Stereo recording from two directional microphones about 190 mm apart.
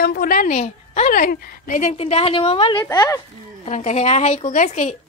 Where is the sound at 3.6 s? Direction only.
35° left (ahead or behind).